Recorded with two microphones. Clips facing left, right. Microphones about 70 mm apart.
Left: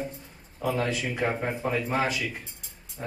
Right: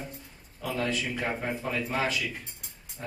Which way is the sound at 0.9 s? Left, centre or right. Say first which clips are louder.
Left 3 dB; centre.